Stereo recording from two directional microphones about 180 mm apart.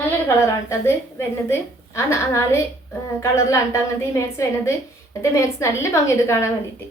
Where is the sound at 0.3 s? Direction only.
15° left (ahead or behind).